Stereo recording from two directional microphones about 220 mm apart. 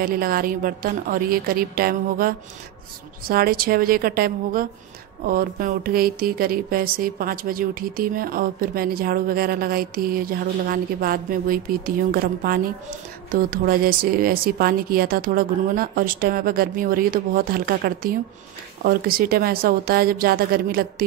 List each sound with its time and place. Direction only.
0.0 s speech: 40° right (ahead or behind)